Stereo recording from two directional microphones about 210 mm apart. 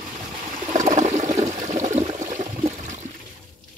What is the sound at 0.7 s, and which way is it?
Water, 35° right (ahead or behind).